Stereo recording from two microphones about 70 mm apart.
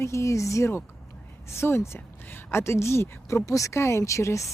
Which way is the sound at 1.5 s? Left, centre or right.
Left.